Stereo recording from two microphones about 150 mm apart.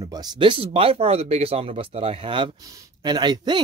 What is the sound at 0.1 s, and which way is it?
Speech, 25° right (ahead or behind).